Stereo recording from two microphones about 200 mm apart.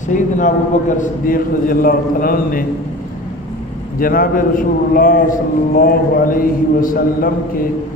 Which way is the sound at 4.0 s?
45° left (ahead or behind).